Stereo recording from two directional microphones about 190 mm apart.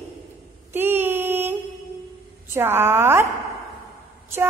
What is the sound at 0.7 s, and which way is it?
Female singing, 10° right (ahead or behind).